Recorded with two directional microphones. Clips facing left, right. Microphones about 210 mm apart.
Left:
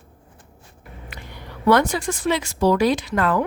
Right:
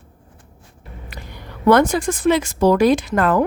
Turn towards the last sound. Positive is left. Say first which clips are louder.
# right 4 dB
turn(degrees=-45)  # may be behind; listen again after turning